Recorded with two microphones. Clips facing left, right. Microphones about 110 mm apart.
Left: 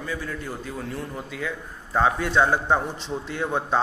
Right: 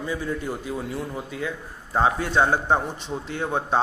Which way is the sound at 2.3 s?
15° right (ahead or behind).